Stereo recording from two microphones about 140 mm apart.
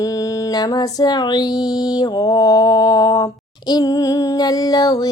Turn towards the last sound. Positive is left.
turn(degrees=25)  # may be behind; listen again after turning